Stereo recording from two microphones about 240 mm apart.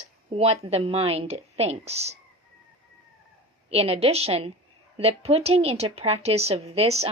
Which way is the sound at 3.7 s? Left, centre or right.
Right.